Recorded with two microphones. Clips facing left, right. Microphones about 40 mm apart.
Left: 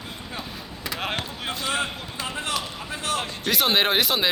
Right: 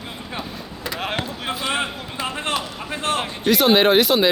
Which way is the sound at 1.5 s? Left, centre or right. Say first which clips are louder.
Right 3 dB; centre.